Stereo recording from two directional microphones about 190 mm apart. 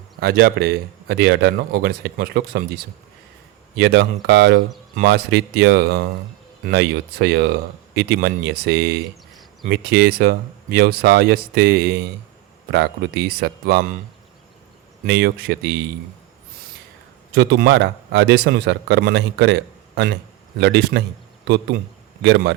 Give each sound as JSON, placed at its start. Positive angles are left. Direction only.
{"t": 0.2, "sound": "speech", "side_deg": -55}
{"t": 3.8, "sound": "speech", "side_deg": -65}
{"t": 15.0, "sound": "speech", "side_deg": -55}
{"t": 17.3, "sound": "speech", "side_deg": -65}
{"t": 20.6, "sound": "speech", "side_deg": -65}